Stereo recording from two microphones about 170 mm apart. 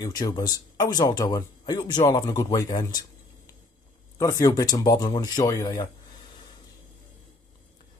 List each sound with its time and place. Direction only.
0.0 s speech: 25° left (ahead or behind)
4.2 s speech: 20° left (ahead or behind)